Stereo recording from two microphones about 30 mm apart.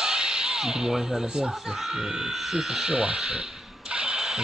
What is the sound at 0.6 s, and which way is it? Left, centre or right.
Speech, centre.